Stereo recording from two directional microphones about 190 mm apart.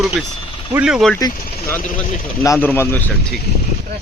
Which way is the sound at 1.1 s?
15° left (ahead or behind).